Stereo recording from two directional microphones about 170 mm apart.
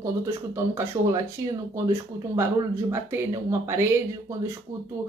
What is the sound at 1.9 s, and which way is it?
Speech, 15° right (ahead or behind).